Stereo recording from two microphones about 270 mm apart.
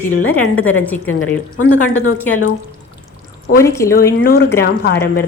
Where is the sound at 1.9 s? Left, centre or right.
Left.